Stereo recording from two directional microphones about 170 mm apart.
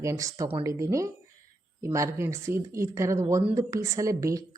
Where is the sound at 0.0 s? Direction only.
20° right (ahead or behind).